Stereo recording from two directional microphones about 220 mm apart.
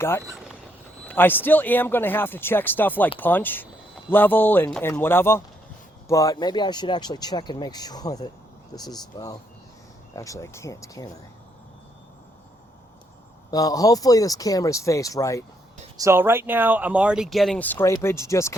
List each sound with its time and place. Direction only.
1.0 s a man's voice: 10° left (ahead or behind)
13.5 s a man's voice: 15° left (ahead or behind)
16.0 s speech: 10° right (ahead or behind); by 18.5 s 15° left (ahead or behind)